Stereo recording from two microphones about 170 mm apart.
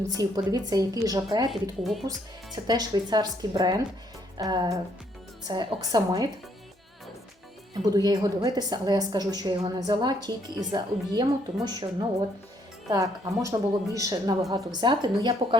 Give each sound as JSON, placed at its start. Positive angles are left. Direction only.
{"t": 0.1, "sound": "a woman's voice", "side_deg": -20}
{"t": 1.8, "sound": "speech", "side_deg": 0}
{"t": 2.0, "sound": "a woman's voice", "side_deg": -25}
{"t": 7.9, "sound": "a woman's voice", "side_deg": -20}